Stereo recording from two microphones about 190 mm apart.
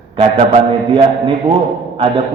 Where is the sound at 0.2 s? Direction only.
30° right (ahead or behind).